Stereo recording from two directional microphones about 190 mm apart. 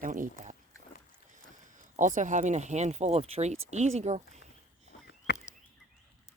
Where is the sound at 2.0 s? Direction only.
40° right (ahead or behind).